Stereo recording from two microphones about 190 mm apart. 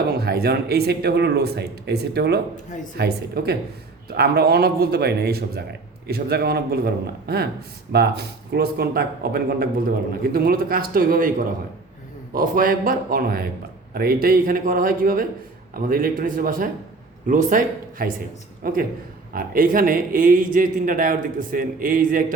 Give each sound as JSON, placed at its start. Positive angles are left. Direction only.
{"t": 0.1, "sound": "a man's voice", "side_deg": -55}